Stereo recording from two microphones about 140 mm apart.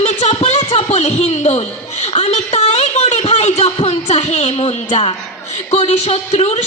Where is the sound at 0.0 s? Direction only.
50° left (ahead or behind).